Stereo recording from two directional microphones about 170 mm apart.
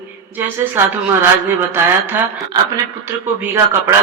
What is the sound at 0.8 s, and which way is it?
Speech, 15° right (ahead or behind).